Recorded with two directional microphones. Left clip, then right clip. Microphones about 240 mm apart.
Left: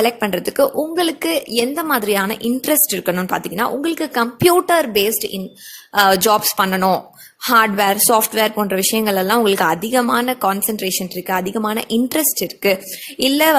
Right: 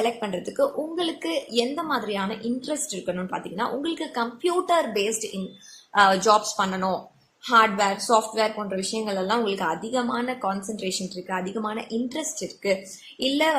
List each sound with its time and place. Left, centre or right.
0.0 s a woman's voice: left